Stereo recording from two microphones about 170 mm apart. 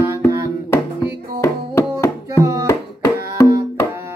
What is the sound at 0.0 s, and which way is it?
Music, 15° right (ahead or behind).